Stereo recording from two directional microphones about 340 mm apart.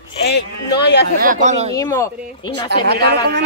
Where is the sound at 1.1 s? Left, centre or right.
Right.